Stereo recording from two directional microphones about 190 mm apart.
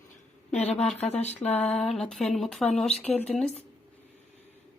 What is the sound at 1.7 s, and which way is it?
Speech, centre (ahead or behind).